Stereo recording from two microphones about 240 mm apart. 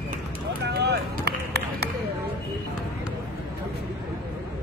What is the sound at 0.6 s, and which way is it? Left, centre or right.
Run, right.